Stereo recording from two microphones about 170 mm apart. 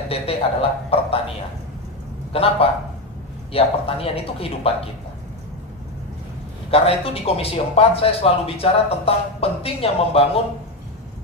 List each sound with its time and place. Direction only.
0.1 s speech: 35° left (ahead or behind)
2.3 s speech: 35° left (ahead or behind)
6.7 s speech: 35° left (ahead or behind)